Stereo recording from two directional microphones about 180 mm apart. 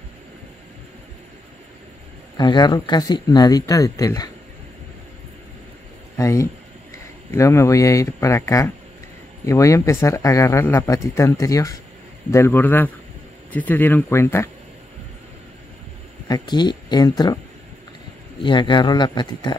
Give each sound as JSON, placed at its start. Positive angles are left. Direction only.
{"t": 2.3, "sound": "speech", "side_deg": 25}
{"t": 6.1, "sound": "speech", "side_deg": 15}
{"t": 16.3, "sound": "speech", "side_deg": 20}
{"t": 18.4, "sound": "speech", "side_deg": 25}